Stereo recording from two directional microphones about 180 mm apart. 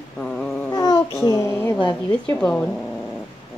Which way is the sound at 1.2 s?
15° left (ahead or behind).